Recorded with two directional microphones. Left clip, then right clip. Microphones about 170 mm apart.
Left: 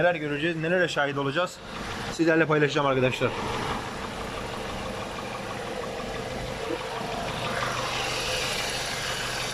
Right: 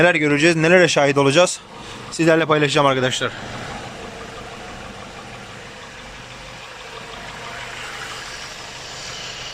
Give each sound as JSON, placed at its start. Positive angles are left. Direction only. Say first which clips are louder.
{"t": 0.0, "sound": "speech", "louder": "right 10 dB", "side_deg": -20}
{"t": 2.1, "sound": "speech", "louder": "right 7 dB", "side_deg": -5}